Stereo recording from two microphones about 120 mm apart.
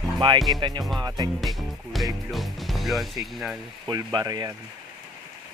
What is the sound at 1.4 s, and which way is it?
Speech, centre (ahead or behind).